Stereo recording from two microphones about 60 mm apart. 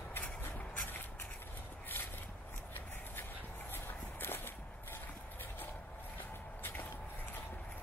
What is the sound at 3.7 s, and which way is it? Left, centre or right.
Walk, left.